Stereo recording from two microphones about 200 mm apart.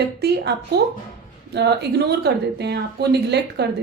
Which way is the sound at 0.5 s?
60° right (ahead or behind).